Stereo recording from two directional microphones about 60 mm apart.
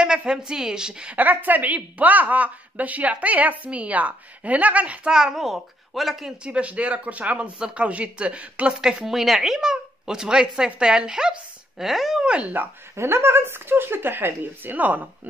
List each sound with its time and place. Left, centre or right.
0.0 s a woman's voice: centre
1.1 s a woman's voice: right
5.1 s a child's voice: centre
6.4 s a woman's voice: right
9.0 s a child's voice: centre
12.3 s a woman's voice: right
12.9 s speech: right